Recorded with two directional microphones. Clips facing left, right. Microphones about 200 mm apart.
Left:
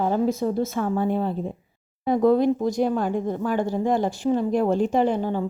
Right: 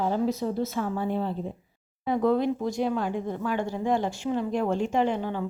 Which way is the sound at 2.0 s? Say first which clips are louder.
Left 5 dB; 40° left (ahead or behind).